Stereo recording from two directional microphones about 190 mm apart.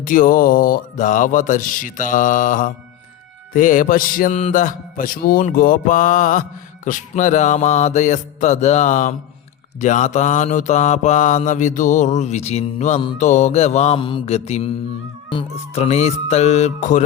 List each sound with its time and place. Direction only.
0.0 s music: 45° left (ahead or behind)
6.8 s mantra: 40° left (ahead or behind)